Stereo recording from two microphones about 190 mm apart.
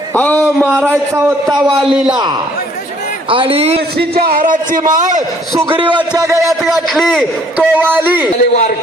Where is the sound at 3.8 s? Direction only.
55° right (ahead or behind).